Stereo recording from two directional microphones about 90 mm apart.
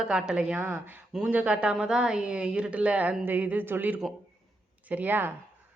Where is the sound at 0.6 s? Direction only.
20° right (ahead or behind).